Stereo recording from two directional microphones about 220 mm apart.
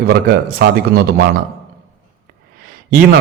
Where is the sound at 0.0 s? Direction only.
45° right (ahead or behind).